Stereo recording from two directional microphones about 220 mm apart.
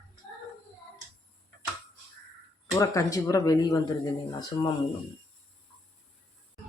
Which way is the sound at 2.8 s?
15° left (ahead or behind).